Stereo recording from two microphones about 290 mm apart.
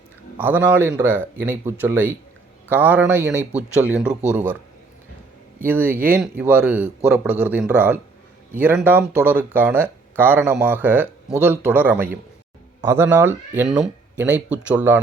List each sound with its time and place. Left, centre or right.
0.3 s a man's voice: centre
5.6 s a man's voice: centre